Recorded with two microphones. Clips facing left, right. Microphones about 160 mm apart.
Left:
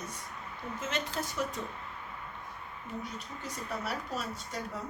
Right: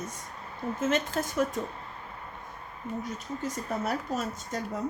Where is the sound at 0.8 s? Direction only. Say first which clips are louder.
Right 7 dB; 50° right (ahead or behind).